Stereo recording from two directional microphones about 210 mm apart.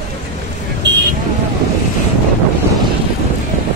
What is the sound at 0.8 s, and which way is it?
Vehicle, 55° right (ahead or behind).